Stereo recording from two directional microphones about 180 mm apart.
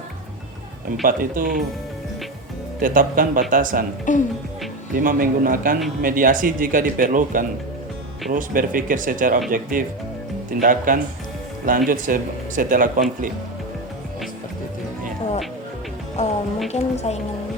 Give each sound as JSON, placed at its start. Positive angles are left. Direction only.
{"t": 1.0, "sound": "speech", "side_deg": -50}
{"t": 2.8, "sound": "speech", "side_deg": -50}
{"t": 4.1, "sound": "speech", "side_deg": 45}
{"t": 4.9, "sound": "speech", "side_deg": -50}
{"t": 16.2, "sound": "a woman's voice", "side_deg": 40}